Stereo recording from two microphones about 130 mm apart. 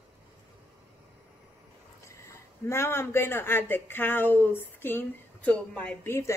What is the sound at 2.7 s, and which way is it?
Speech, 20° left (ahead or behind).